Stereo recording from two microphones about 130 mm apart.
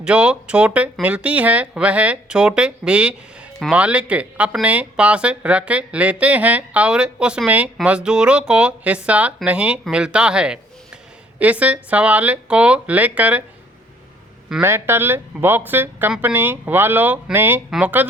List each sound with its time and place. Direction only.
0.0 s speech: 10° right (ahead or behind)
14.6 s speech: 20° right (ahead or behind)